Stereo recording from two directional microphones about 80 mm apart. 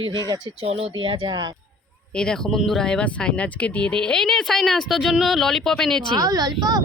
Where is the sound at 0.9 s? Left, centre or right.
Right.